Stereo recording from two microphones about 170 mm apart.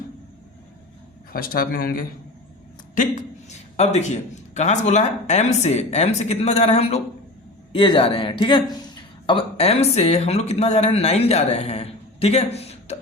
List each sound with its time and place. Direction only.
1.3 s a man's voice: 60° left (ahead or behind); by 13.0 s 40° left (ahead or behind)